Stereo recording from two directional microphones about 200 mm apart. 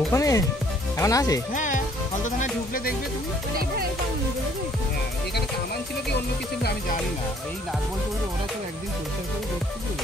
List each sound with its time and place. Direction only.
0.1 s speech: 15° left (ahead or behind)
1.5 s music: 40° left (ahead or behind)